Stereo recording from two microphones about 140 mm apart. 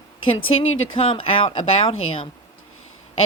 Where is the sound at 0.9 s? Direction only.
40° left (ahead or behind).